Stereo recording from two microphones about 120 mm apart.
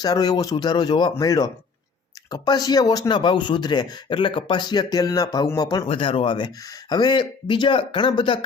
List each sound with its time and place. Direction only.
0.0 s speech: 35° left (ahead or behind)
5.8 s speech: 50° left (ahead or behind)